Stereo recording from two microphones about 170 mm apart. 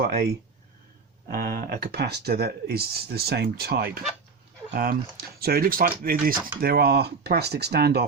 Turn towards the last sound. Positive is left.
turn(degrees=-70)  # may be behind; listen again after turning